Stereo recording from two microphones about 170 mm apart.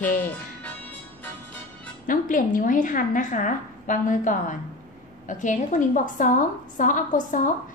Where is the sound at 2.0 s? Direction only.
50° left (ahead or behind).